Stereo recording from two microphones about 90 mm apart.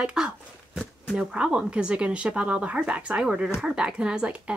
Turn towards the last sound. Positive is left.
turn(degrees=-10)  # may be behind; listen again after turning